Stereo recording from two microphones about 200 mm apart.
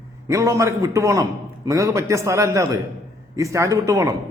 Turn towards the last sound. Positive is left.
turn(degrees=-15)  # may be behind; listen again after turning